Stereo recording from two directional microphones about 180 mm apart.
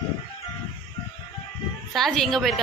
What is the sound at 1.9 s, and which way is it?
Speech, centre (ahead or behind).